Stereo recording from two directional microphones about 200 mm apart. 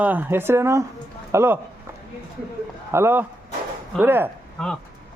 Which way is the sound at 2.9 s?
10° right (ahead or behind).